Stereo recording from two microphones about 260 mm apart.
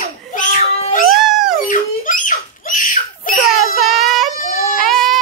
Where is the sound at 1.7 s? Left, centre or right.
Left.